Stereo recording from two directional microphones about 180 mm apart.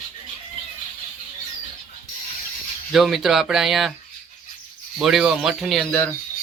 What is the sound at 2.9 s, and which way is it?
Speech, centre (ahead or behind).